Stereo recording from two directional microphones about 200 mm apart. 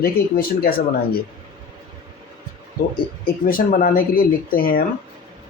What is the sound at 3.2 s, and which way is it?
Speech, 45° left (ahead or behind).